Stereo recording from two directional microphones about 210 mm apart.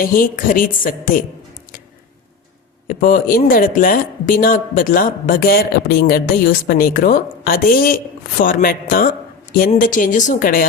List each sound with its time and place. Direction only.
0.0 s a woman's voice: 40° left (ahead or behind)
2.8 s speech: 40° left (ahead or behind)